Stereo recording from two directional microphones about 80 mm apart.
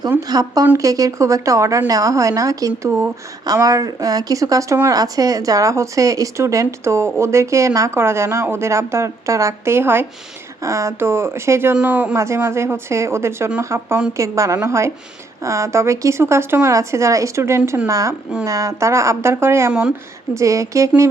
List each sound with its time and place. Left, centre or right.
0.2 s a woman's voice: right
10.6 s speech: right
12.1 s speech: right